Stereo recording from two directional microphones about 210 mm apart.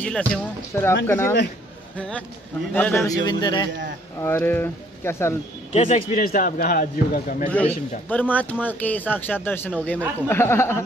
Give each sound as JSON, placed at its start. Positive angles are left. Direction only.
{"t": 0.0, "sound": "a man's voice", "side_deg": 5}
{"t": 5.7, "sound": "a man's voice", "side_deg": 30}
{"t": 6.1, "sound": "a man's voice", "side_deg": 40}
{"t": 7.4, "sound": "a man's voice", "side_deg": 5}